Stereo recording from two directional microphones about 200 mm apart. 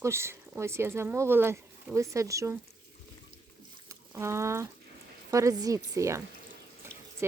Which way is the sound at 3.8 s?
15° right (ahead or behind).